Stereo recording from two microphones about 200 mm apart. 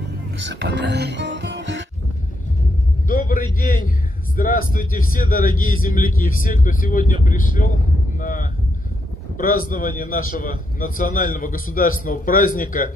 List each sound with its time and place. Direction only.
0.4 s music: 60° right (ahead or behind)
3.1 s vehicle: 45° left (ahead or behind)
3.5 s a sound: 45° left (ahead or behind)
4.4 s a man's voice: 45° left (ahead or behind)
8.2 s a sound: 40° left (ahead or behind)
9.4 s a man's voice: 45° left (ahead or behind)